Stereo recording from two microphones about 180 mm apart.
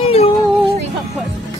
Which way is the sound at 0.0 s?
35° left (ahead or behind).